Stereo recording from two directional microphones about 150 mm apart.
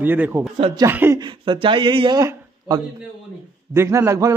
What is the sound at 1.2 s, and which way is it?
A man's voice, 30° right (ahead or behind).